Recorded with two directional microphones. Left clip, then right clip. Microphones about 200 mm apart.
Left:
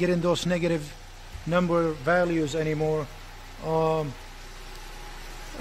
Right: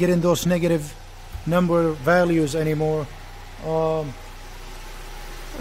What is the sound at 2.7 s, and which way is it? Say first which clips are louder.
A man's voice: right 3 dB; centre (ahead or behind).